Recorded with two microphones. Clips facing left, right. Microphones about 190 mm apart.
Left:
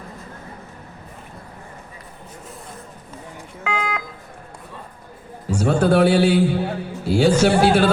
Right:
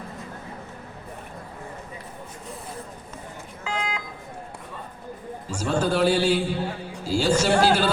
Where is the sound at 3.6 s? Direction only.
60° left (ahead or behind).